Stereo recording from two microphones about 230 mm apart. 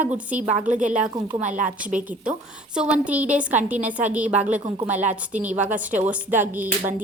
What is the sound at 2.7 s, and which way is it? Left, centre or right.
A woman's voice, centre.